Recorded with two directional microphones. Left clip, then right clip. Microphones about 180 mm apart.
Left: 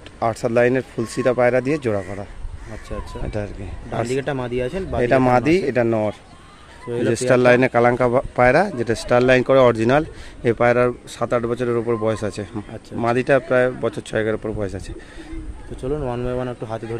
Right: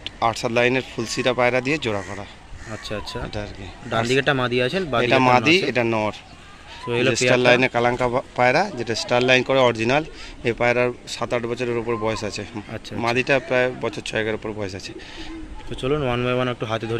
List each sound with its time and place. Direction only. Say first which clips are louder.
0.2 s speech: left 2 dB; 45° left (ahead or behind)
3.4 s speech: left 9 dB; 50° left (ahead or behind)
4.1 s speech: right 6 dB; 10° right (ahead or behind)
5.0 s speech: left 1 dB; 45° left (ahead or behind)
6.9 s speech: right 2 dB; 5° right (ahead or behind)
7.2 s speech: left 3 dB; 55° left (ahead or behind)
15.7 s speech: right 2 dB; 5° right (ahead or behind)